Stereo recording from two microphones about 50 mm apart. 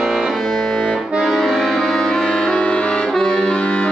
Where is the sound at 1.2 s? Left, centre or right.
Centre.